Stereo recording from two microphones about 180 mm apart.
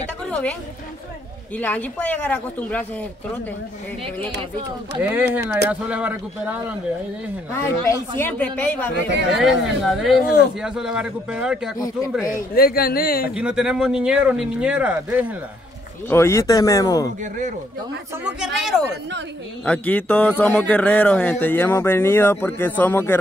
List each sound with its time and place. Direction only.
0.3 s a woman's voice: 5° left (ahead or behind)
1.6 s speech: 10° left (ahead or behind)
5.1 s a man's voice: 10° right (ahead or behind)
7.5 s speech: 15° left (ahead or behind)
9.4 s speech: centre (ahead or behind)
12.5 s speech: 55° left (ahead or behind)
13.3 s speech: 5° right (ahead or behind)
16.1 s speech: 15° left (ahead or behind)
17.2 s speech: 40° right (ahead or behind)
18.6 s speech: centre (ahead or behind)